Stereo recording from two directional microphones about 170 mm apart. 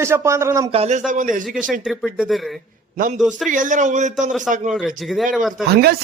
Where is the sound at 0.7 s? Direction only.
40° right (ahead or behind).